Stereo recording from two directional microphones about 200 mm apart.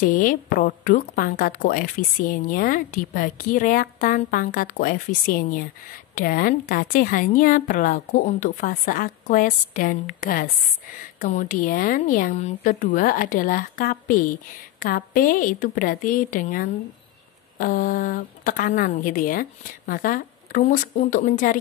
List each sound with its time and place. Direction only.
0.0 s a woman's voice: 40° left (ahead or behind)